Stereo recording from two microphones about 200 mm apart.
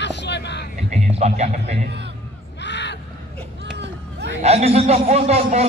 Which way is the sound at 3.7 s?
60° right (ahead or behind).